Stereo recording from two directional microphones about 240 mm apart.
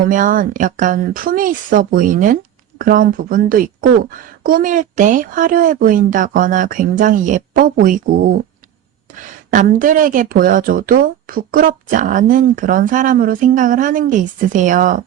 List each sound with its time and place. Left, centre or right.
0.0 s speech: right
9.5 s speech: right